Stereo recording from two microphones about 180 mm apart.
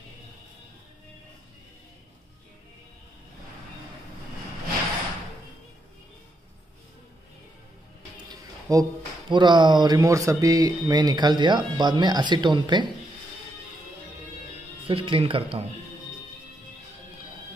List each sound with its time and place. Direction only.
8.3 s music: 20° right (ahead or behind)
9.3 s speech: 25° right (ahead or behind)
14.9 s speech: 30° right (ahead or behind)